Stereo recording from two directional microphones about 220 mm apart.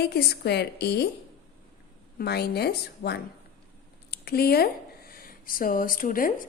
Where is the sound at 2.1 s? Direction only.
45° left (ahead or behind).